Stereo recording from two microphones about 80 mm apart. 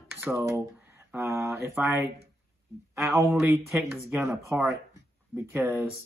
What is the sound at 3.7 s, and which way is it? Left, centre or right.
Speech, centre.